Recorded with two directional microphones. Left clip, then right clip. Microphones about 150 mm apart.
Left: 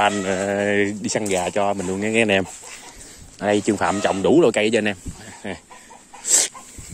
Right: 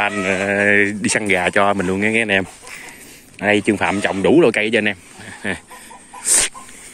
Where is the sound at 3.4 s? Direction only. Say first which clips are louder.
Right 3 dB; 20° left (ahead or behind).